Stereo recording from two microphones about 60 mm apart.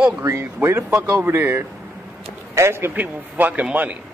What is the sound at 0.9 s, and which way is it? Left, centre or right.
Speech, right.